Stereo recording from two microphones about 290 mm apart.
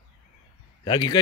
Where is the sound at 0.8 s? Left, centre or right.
Centre.